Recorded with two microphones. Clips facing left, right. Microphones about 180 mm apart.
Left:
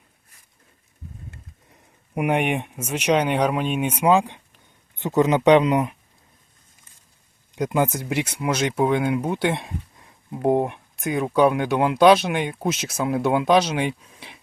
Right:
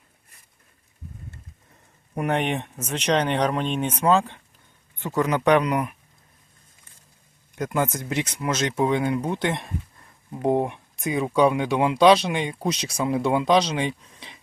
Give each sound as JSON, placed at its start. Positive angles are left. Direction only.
{"t": 2.1, "sound": "speech", "side_deg": 10}
{"t": 7.5, "sound": "speech", "side_deg": 15}